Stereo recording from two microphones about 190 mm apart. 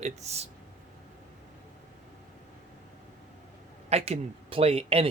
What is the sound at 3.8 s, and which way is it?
Speech, 35° right (ahead or behind).